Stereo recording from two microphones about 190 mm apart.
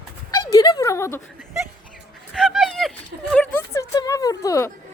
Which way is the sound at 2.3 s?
Centre (ahead or behind).